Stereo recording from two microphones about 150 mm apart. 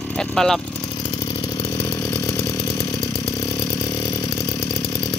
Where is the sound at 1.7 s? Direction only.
15° left (ahead or behind).